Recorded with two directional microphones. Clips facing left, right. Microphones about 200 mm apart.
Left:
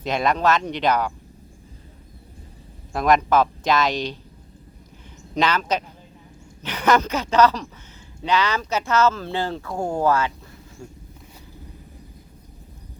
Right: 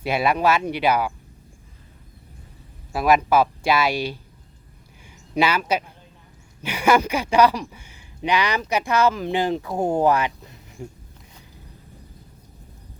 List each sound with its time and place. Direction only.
0.0 s speech: 10° right (ahead or behind)
2.9 s speech: 5° right (ahead or behind)
5.3 s speech: 10° right (ahead or behind)